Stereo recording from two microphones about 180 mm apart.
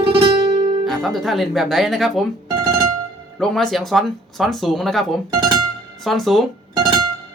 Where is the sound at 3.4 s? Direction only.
Centre (ahead or behind).